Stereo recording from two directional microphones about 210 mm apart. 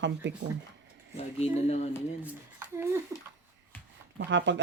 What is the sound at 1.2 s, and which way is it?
Speech, 30° left (ahead or behind).